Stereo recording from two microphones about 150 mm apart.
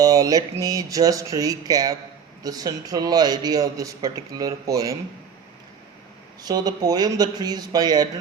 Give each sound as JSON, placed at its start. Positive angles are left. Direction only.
{"t": 0.0, "sound": "a man's voice", "side_deg": -25}
{"t": 6.4, "sound": "a man's voice", "side_deg": -25}